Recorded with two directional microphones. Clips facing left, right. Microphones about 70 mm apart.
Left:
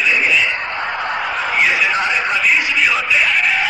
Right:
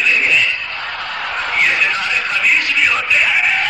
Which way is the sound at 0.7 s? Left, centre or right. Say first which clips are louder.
Left 4 dB; centre.